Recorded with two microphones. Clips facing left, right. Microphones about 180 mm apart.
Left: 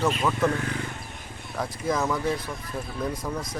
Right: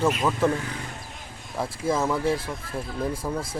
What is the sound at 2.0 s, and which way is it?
Speech, 5° right (ahead or behind).